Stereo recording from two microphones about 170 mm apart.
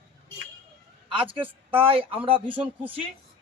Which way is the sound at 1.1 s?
30° right (ahead or behind).